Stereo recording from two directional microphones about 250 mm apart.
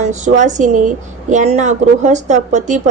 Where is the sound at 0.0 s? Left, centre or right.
Right.